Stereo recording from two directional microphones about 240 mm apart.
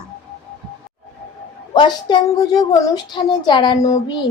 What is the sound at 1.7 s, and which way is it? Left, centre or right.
Speech, centre.